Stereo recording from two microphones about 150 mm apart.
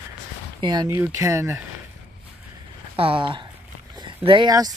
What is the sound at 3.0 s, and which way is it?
Speech, 35° right (ahead or behind).